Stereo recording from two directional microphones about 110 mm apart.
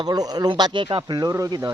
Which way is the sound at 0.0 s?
35° right (ahead or behind).